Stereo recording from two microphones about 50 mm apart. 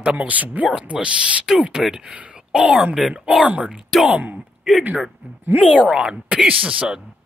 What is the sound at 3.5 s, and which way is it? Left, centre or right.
Speech, right.